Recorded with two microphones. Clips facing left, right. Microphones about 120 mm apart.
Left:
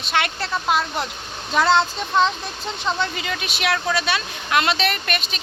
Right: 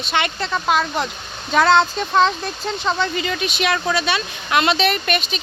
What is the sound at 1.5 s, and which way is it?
Speech, 60° right (ahead or behind).